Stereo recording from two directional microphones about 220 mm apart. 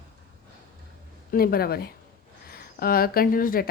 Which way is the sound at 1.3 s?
45° left (ahead or behind).